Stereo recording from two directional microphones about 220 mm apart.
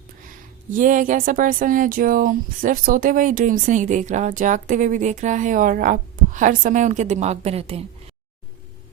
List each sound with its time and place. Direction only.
0.3 s speech: 35° right (ahead or behind)